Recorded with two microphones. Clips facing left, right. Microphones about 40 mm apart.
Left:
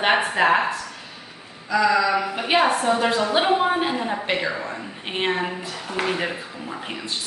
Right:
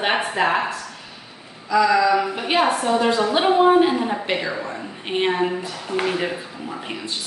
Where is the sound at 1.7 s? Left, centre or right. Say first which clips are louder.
Right 2 dB; centre.